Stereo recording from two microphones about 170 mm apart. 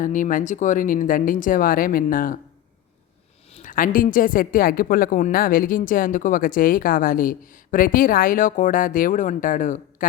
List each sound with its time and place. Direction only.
0.0 s speech: 50° left (ahead or behind)
3.5 s a woman's voice: 50° left (ahead or behind)